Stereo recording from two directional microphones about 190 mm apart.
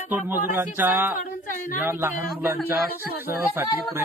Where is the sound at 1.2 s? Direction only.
45° left (ahead or behind).